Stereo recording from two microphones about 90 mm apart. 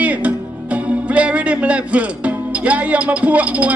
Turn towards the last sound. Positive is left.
turn(degrees=-15)  # may be behind; listen again after turning